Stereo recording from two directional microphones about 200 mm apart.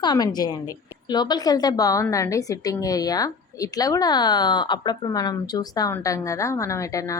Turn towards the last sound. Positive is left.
turn(degrees=15)  # may be behind; listen again after turning